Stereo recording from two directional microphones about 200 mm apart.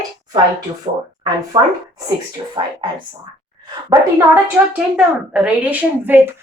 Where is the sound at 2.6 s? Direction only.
20° right (ahead or behind).